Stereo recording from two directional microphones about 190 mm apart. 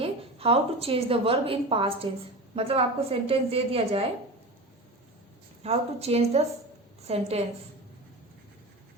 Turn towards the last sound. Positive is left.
turn(degrees=-30)  # may be behind; listen again after turning